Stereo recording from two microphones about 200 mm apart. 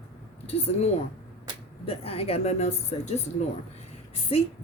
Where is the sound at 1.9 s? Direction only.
30° left (ahead or behind).